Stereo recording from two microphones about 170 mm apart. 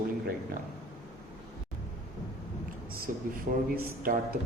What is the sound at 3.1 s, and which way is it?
Speech, 55° right (ahead or behind).